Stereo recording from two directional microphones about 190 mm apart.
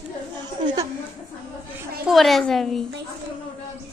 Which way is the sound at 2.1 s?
Centre (ahead or behind).